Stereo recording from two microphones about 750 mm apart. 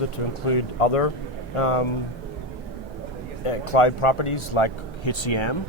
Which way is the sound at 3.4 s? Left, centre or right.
Left.